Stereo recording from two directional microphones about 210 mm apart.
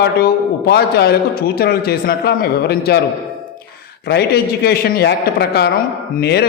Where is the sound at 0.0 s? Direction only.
50° left (ahead or behind).